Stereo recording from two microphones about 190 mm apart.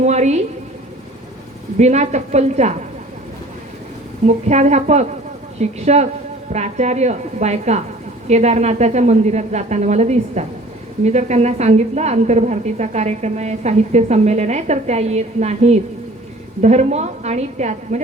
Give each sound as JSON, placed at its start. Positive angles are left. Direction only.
{"t": 0.0, "sound": "a woman's voice", "side_deg": -35}
{"t": 1.8, "sound": "a woman's voice", "side_deg": -35}
{"t": 4.3, "sound": "a woman's voice", "side_deg": -35}